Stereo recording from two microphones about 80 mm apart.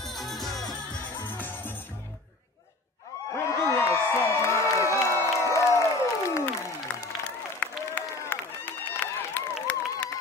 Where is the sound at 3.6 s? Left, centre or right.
Left.